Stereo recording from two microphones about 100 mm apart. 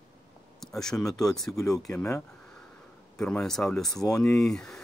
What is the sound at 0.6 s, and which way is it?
Speech, 5° left (ahead or behind).